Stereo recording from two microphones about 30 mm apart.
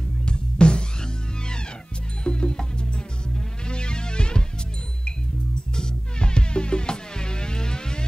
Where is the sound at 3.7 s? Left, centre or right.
Left.